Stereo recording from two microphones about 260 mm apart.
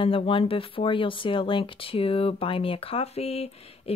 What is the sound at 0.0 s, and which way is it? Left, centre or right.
Speech, left.